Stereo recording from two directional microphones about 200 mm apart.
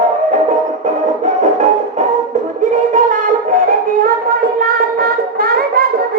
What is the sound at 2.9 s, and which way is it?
Child singing, 40° right (ahead or behind).